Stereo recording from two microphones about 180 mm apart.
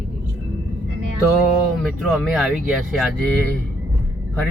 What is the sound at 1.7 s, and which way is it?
Speech, centre (ahead or behind).